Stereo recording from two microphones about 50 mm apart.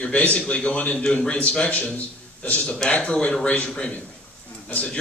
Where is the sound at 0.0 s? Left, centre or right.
Left.